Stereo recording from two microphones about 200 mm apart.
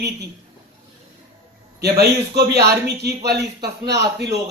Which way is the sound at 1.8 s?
55° right (ahead or behind).